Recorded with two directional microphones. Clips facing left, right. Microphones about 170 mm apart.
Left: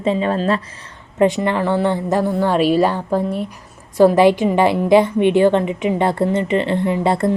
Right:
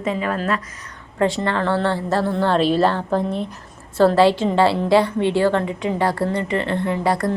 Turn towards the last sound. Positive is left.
turn(degrees=25)  # may be behind; listen again after turning